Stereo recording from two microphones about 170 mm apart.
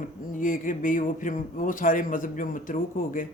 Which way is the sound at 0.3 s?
50° left (ahead or behind).